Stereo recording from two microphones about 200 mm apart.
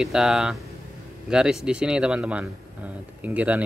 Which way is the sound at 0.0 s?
5° right (ahead or behind).